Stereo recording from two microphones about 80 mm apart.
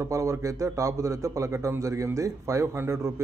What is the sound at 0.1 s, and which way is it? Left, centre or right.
Speech, right.